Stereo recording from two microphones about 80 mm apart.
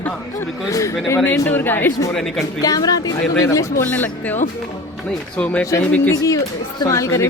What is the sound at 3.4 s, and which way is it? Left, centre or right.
Speech, left.